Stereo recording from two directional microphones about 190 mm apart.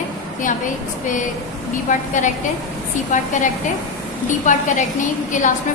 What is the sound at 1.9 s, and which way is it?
Speech, 40° left (ahead or behind).